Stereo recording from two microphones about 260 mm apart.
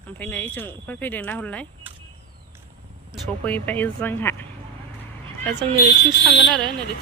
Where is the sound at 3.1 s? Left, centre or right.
Centre.